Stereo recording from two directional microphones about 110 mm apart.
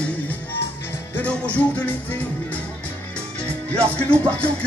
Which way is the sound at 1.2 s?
10° left (ahead or behind).